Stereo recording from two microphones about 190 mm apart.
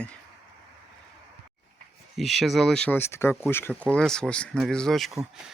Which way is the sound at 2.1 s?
Centre (ahead or behind).